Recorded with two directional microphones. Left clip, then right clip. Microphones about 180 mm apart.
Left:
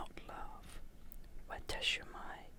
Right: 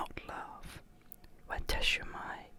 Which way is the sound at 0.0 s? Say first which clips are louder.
Right 7 dB; 25° right (ahead or behind).